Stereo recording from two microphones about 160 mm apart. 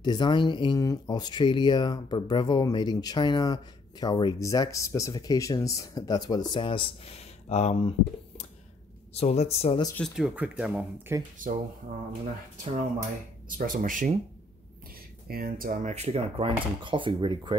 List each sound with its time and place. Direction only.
0.0 s speech: 30° left (ahead or behind)
9.1 s speech: 40° left (ahead or behind)
9.9 s speech: centre (ahead or behind)
11.4 s speech: 55° right (ahead or behind)
13.5 s speech: 60° right (ahead or behind)
15.2 s speech: 70° right (ahead or behind); by 17.6 s 30° right (ahead or behind)